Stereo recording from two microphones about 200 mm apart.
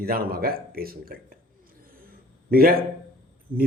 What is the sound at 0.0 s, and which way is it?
Speech, 50° right (ahead or behind).